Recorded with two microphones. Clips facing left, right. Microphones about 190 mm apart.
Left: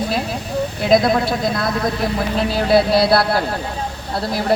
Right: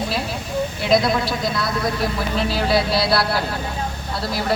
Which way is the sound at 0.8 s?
50° left (ahead or behind).